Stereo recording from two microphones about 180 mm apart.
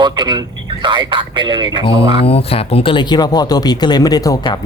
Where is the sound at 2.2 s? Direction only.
30° left (ahead or behind).